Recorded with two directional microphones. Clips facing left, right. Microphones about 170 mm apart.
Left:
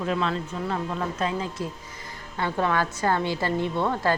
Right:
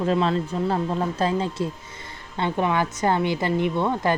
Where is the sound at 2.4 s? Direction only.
20° right (ahead or behind).